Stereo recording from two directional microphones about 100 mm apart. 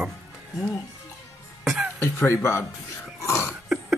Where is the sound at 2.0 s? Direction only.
30° left (ahead or behind).